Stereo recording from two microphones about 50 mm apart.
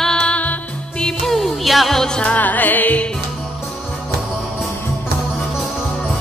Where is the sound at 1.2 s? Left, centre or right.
Centre.